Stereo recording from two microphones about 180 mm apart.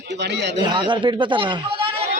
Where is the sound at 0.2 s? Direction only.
70° right (ahead or behind).